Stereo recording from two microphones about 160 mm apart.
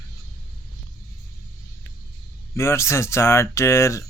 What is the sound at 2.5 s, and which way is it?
Speech, 15° left (ahead or behind).